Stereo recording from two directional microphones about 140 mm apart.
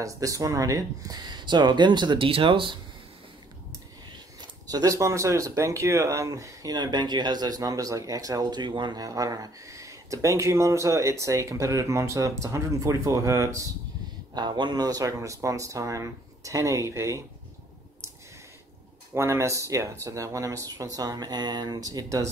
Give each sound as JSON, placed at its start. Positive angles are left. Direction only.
{"t": 0.0, "sound": "speech", "side_deg": -25}
{"t": 4.4, "sound": "speech", "side_deg": -25}
{"t": 19.1, "sound": "speech", "side_deg": -20}